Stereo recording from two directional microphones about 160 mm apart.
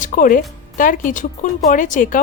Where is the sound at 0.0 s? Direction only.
55° left (ahead or behind).